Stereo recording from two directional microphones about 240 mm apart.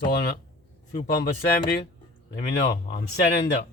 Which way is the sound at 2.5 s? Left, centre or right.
Left.